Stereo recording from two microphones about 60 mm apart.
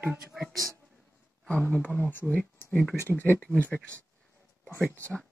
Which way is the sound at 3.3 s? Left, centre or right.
Centre.